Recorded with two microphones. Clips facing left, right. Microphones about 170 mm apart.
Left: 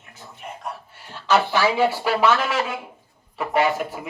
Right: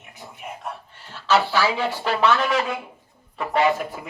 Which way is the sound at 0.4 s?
5° right (ahead or behind).